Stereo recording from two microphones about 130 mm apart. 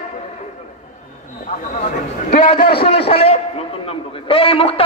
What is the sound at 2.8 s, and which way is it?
A man's voice, 50° left (ahead or behind).